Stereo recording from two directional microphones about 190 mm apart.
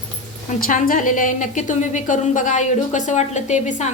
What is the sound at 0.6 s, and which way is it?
A woman's voice, 45° left (ahead or behind).